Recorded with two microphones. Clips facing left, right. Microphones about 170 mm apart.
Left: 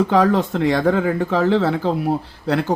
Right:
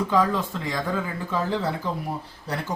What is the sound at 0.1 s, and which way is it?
Speech, 75° left (ahead or behind).